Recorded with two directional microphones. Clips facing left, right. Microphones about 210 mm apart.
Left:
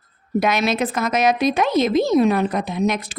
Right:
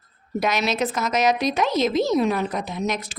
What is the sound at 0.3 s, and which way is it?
A woman's voice, 55° left (ahead or behind).